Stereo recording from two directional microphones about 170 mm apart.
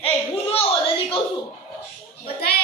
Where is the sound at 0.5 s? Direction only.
30° left (ahead or behind).